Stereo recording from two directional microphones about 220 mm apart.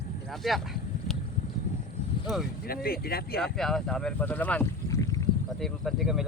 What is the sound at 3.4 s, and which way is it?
Speech, centre (ahead or behind).